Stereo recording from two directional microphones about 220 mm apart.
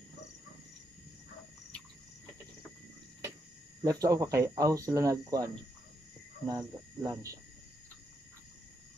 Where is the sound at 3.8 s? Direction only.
15° right (ahead or behind).